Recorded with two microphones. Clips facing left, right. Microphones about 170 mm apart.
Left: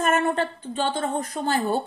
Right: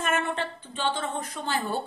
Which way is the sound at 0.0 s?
40° left (ahead or behind).